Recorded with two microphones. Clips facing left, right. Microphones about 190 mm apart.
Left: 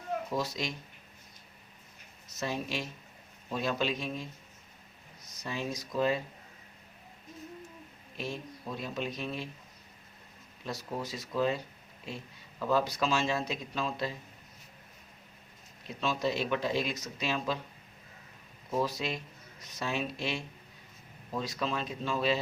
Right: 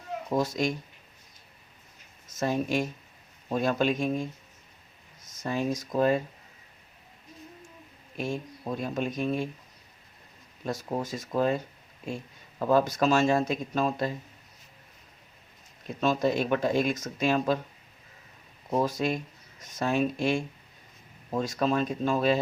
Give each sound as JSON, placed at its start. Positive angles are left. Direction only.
{"t": 0.3, "sound": "speech", "side_deg": -50}
{"t": 2.3, "sound": "speech", "side_deg": -50}
{"t": 8.2, "sound": "speech", "side_deg": -50}
{"t": 10.6, "sound": "speech", "side_deg": -50}
{"t": 16.0, "sound": "speech", "side_deg": -45}
{"t": 18.8, "sound": "speech", "side_deg": -45}